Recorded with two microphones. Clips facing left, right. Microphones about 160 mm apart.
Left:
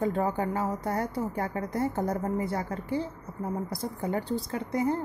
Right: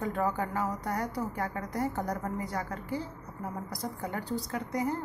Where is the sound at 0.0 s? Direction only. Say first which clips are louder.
Left 3 dB; 25° left (ahead or behind).